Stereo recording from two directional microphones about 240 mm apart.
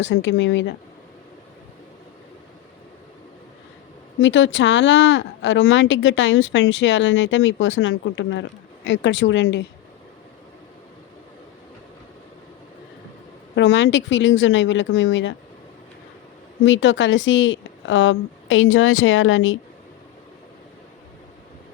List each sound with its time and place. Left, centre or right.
0.0 s speech: left
4.2 s speech: left
13.6 s speech: left
16.6 s speech: left